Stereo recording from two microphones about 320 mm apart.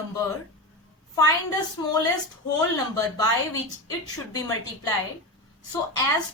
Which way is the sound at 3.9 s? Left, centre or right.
Centre.